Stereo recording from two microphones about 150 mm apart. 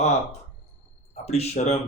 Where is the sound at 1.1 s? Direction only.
45° left (ahead or behind).